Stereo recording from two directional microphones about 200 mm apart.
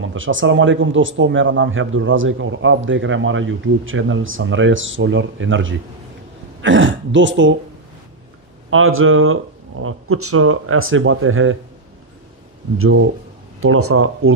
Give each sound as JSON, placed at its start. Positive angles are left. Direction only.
{"t": 0.0, "sound": "speech", "side_deg": -75}
{"t": 8.6, "sound": "speech", "side_deg": -90}
{"t": 12.7, "sound": "speech", "side_deg": -90}